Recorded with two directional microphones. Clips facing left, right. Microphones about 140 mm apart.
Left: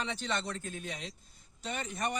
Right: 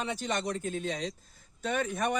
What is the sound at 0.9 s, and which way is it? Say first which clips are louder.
Speech: right 8 dB; 35° right (ahead or behind).